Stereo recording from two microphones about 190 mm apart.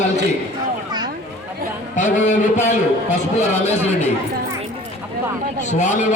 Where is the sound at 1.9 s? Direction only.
40° left (ahead or behind).